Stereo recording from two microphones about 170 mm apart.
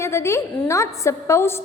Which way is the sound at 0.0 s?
15° left (ahead or behind).